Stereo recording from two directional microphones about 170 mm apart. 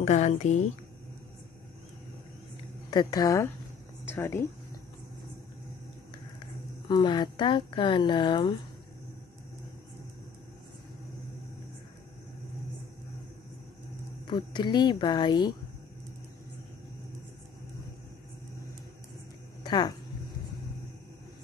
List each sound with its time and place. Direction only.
0.0 s a woman's voice: 40° left (ahead or behind)
2.9 s speech: 25° left (ahead or behind)
6.4 s a woman's voice: 25° left (ahead or behind)
14.2 s speech: 25° left (ahead or behind)
19.6 s a sound: 25° left (ahead or behind)